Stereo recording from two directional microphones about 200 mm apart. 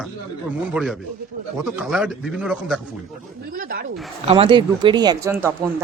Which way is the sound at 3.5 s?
45° right (ahead or behind).